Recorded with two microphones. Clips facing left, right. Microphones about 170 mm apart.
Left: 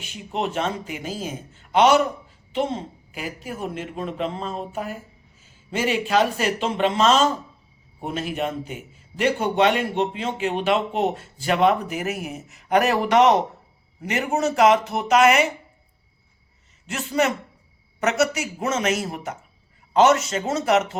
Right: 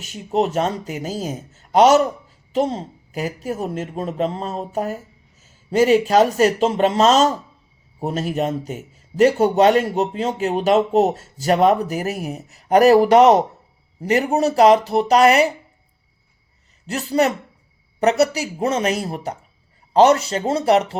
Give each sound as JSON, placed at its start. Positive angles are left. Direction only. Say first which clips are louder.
{"t": 0.0, "sound": "a man's voice", "louder": "right 7 dB", "side_deg": -40}
{"t": 16.8, "sound": "a man's voice", "louder": "right 4 dB", "side_deg": -35}